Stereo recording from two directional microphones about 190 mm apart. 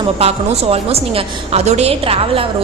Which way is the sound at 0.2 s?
35° right (ahead or behind).